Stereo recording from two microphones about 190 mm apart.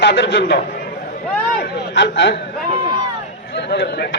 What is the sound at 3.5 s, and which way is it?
Speech, 55° left (ahead or behind).